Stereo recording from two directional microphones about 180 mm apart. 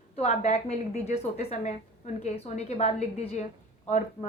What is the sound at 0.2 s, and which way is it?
A woman's voice, 40° left (ahead or behind).